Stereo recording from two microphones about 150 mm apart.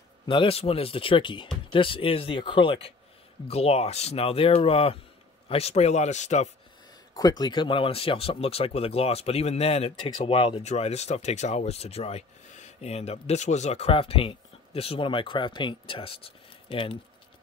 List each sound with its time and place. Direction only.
0.3 s a man's voice: 40° left (ahead or behind)
7.2 s speech: 25° left (ahead or behind)